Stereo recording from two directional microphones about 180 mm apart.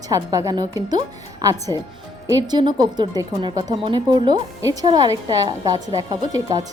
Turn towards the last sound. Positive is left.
turn(degrees=-20)  # may be behind; listen again after turning